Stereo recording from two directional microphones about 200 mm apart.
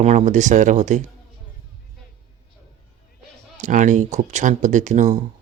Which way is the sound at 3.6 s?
40° right (ahead or behind).